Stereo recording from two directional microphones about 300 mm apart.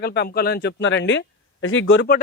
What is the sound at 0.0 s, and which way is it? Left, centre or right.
Speech, left.